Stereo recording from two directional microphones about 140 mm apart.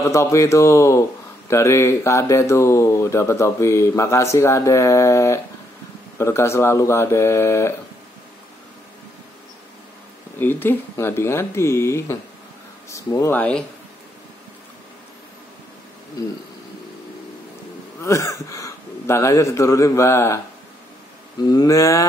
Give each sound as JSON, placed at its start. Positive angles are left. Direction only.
{"t": 0.0, "sound": "speech", "side_deg": 20}
{"t": 10.4, "sound": "speech", "side_deg": 15}
{"t": 18.0, "sound": "speech", "side_deg": 25}
{"t": 21.5, "sound": "speech", "side_deg": 25}